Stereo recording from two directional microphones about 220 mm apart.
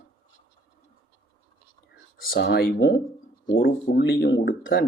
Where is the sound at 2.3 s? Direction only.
50° left (ahead or behind).